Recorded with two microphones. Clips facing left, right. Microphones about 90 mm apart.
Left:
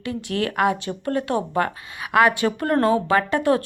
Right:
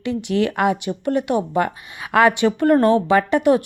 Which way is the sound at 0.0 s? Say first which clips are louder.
Right 5 dB; 20° right (ahead or behind).